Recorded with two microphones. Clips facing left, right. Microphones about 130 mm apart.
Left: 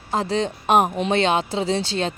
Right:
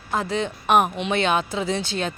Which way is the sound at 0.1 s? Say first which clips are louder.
Left 2 dB; 30° left (ahead or behind).